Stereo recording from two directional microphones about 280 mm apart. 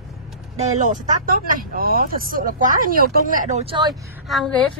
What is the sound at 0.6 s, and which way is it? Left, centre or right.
Speech, right.